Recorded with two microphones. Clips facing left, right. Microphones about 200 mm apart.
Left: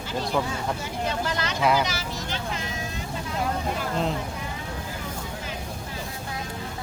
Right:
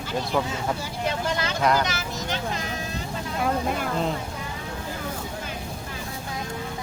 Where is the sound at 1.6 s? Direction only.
5° left (ahead or behind).